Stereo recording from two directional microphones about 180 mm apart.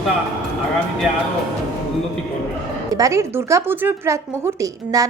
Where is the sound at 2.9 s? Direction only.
15° right (ahead or behind).